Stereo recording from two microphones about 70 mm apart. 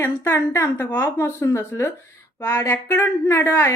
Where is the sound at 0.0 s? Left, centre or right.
Left.